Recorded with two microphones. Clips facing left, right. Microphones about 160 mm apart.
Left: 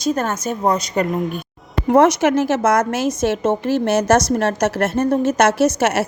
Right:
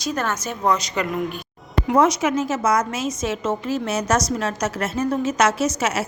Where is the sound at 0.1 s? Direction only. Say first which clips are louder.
Left 5 dB; 45° left (ahead or behind).